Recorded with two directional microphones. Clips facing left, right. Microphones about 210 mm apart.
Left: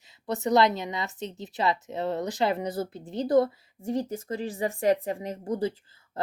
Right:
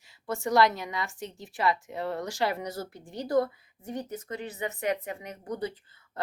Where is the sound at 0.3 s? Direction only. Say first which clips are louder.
Left 2 dB; 20° left (ahead or behind).